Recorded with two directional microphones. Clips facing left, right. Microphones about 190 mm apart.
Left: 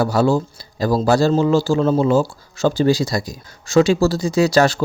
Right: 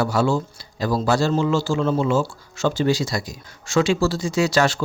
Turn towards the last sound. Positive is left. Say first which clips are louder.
# left 4 dB
turn(degrees=35)  # may be behind; listen again after turning